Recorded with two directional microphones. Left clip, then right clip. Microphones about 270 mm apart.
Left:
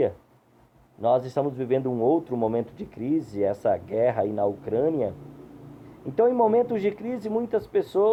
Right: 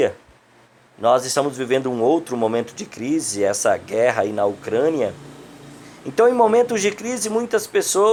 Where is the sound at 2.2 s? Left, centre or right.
Centre.